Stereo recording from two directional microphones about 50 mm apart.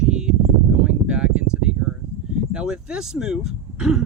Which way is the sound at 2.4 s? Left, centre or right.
Centre.